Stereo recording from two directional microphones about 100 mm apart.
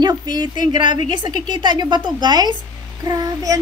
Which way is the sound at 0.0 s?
45° right (ahead or behind).